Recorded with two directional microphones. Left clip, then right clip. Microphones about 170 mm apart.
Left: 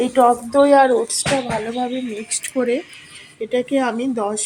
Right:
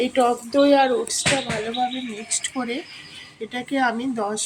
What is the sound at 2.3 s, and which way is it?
Speech, 15° left (ahead or behind).